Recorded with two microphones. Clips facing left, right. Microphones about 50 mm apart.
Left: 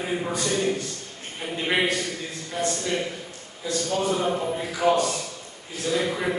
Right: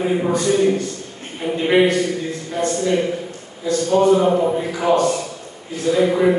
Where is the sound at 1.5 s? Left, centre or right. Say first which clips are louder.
Right 9 dB; centre.